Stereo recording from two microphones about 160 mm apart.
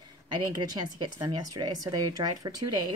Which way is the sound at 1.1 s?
25° right (ahead or behind).